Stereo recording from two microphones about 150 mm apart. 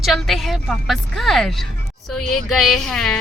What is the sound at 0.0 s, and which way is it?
Speech, centre (ahead or behind).